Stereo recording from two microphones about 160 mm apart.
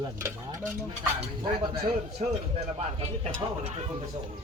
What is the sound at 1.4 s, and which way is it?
Speech, 30° right (ahead or behind).